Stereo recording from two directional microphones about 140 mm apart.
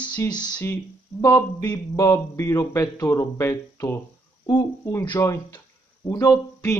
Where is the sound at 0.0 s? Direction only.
15° left (ahead or behind).